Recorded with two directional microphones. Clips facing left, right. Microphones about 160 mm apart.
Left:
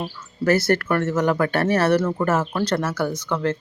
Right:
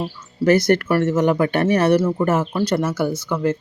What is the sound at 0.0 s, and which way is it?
Speech, 15° right (ahead or behind).